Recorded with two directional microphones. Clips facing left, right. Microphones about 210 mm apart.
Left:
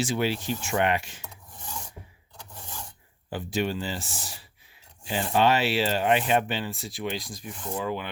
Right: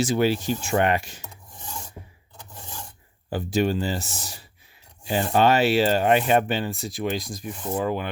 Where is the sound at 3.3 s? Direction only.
40° right (ahead or behind).